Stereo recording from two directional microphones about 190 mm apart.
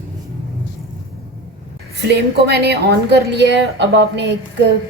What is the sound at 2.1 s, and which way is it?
A woman's voice, 60° right (ahead or behind).